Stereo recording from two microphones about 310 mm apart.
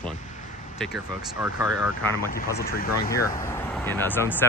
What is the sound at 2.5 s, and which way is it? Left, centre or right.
Speech, left.